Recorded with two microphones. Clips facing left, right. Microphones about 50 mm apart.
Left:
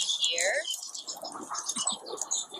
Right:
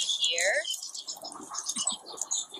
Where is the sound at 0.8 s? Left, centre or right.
Left.